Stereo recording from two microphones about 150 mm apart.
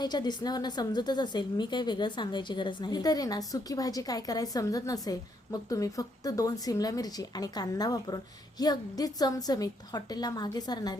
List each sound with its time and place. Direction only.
0.0 s a woman's voice: 30° left (ahead or behind)